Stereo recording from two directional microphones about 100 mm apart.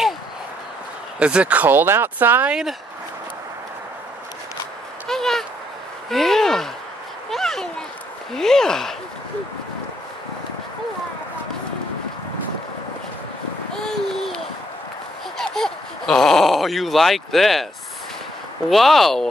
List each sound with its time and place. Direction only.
1.2 s speech: 10° right (ahead or behind)
5.0 s a sound: 5° left (ahead or behind)
8.3 s speech: 5° left (ahead or behind)
13.8 s a sound: 5° left (ahead or behind)
15.3 s speech: 5° left (ahead or behind)
18.7 s speech: centre (ahead or behind)